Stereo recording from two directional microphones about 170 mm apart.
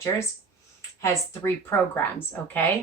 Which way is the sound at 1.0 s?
15° left (ahead or behind).